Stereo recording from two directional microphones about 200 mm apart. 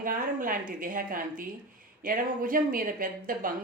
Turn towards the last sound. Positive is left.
turn(degrees=-45)  # may be behind; listen again after turning